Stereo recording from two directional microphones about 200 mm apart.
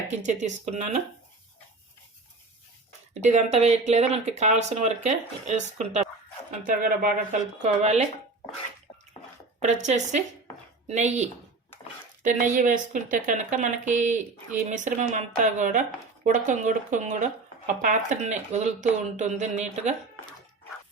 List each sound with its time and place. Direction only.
0.2 s speech: 35° right (ahead or behind)
3.2 s speech: 35° right (ahead or behind)
9.6 s speech: 35° right (ahead or behind)
12.2 s speech: 40° right (ahead or behind)